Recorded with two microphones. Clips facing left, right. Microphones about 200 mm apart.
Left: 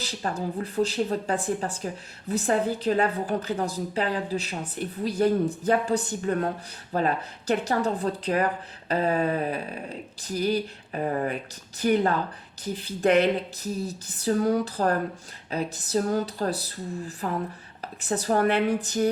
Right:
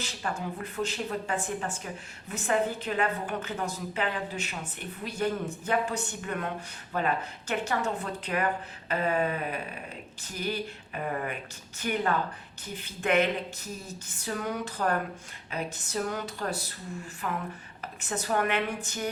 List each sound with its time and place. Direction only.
0.0 s a woman's voice: 35° left (ahead or behind)